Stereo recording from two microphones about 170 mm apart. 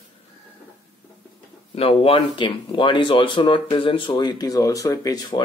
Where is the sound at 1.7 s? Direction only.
35° left (ahead or behind).